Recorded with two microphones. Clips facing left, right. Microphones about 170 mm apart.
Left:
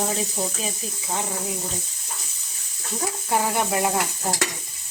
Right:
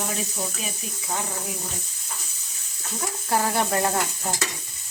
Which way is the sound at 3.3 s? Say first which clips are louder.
Even; 15° left (ahead or behind).